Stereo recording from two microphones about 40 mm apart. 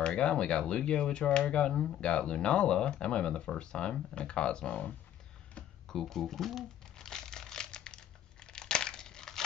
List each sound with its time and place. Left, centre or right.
0.0 s speech: left
5.9 s speech: centre
7.0 s crumpling: centre